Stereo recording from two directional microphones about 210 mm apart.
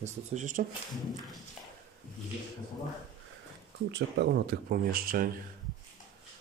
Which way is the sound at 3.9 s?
50° right (ahead or behind).